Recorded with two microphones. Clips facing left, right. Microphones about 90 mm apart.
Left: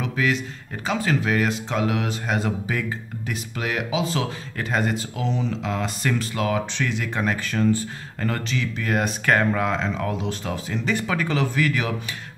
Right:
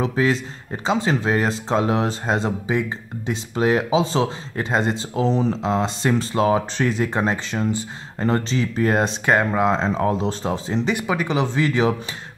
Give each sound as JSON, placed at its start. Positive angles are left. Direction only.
{"t": 0.0, "sound": "speech", "side_deg": -30}
{"t": 9.8, "sound": "speech", "side_deg": -35}
{"t": 11.0, "sound": "speech", "side_deg": -20}